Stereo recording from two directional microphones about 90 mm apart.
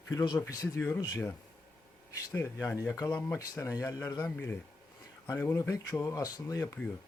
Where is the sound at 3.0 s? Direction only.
20° left (ahead or behind).